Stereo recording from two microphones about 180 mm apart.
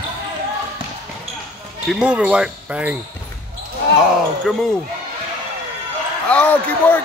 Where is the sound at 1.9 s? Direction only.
5° right (ahead or behind).